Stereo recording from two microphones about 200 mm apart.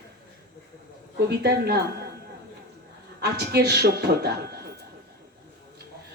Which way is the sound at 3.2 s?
55° right (ahead or behind).